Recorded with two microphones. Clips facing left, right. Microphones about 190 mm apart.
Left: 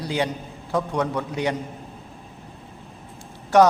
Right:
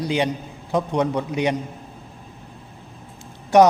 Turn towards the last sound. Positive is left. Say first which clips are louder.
# right 2 dB
turn(degrees=-15)  # may be behind; listen again after turning